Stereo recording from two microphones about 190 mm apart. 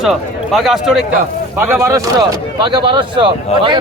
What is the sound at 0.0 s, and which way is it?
Speech, centre (ahead or behind).